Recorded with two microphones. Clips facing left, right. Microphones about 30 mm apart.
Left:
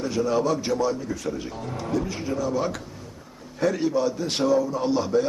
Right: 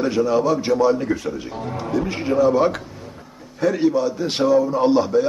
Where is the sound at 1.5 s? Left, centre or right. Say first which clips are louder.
Right 7 dB; centre.